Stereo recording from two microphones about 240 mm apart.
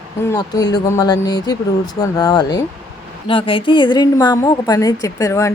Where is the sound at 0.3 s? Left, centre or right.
Centre.